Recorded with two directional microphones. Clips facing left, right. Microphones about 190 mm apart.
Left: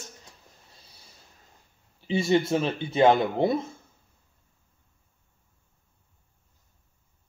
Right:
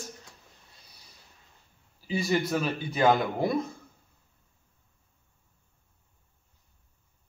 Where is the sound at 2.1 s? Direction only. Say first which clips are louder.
Left 4 dB; 25° left (ahead or behind).